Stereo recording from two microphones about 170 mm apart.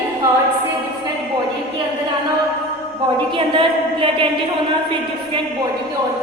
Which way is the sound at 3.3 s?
30° right (ahead or behind).